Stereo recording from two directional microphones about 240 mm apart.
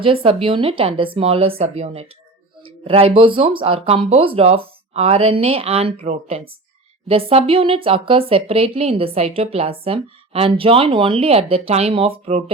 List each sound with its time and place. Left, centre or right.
0.0 s speech: right